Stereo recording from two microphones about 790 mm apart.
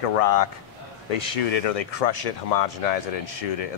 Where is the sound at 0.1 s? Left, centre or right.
Left.